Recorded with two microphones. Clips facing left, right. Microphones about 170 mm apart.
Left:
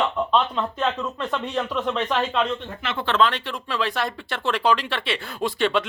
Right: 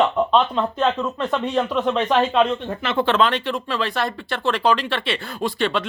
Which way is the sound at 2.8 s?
45° right (ahead or behind).